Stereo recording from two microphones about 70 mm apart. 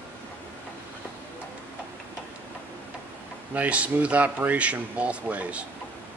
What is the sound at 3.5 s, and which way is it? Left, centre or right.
Speech, centre.